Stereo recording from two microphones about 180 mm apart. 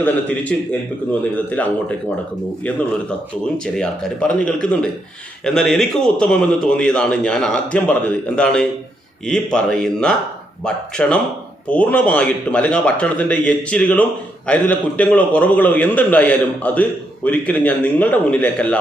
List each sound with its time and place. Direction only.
0.0 s a man's voice: 10° left (ahead or behind)
3.8 s a man's voice: 5° left (ahead or behind)